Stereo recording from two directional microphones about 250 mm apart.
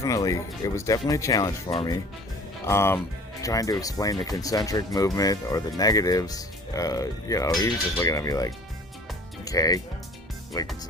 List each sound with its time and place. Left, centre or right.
0.0 s speech: centre